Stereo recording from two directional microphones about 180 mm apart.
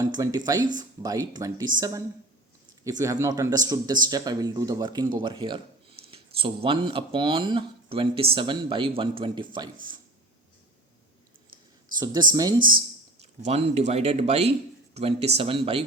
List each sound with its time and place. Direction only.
0.0 s speech: 20° right (ahead or behind)
12.3 s speech: 25° right (ahead or behind)
13.4 s speech: 35° right (ahead or behind)